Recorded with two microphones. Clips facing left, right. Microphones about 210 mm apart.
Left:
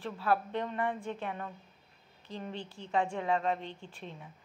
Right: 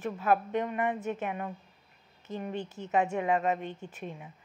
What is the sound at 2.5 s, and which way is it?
Speech, 45° right (ahead or behind).